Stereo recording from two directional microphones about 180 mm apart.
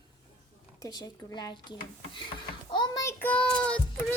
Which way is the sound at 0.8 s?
25° left (ahead or behind).